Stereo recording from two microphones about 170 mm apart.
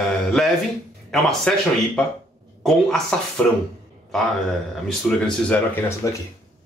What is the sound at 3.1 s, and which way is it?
Speech, 5° left (ahead or behind).